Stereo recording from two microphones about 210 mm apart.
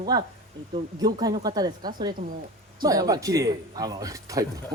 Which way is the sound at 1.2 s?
20° right (ahead or behind).